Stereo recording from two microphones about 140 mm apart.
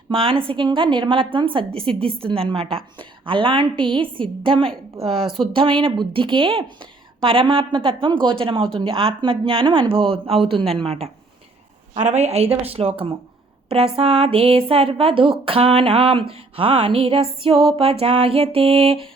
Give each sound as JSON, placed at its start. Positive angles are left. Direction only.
{"t": 0.1, "sound": "a woman's voice", "side_deg": -40}